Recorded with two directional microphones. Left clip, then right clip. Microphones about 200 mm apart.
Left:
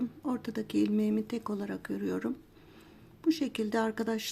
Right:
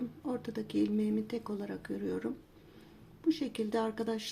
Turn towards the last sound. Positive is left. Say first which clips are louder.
# left 3 dB
turn(degrees=25)  # may be behind; listen again after turning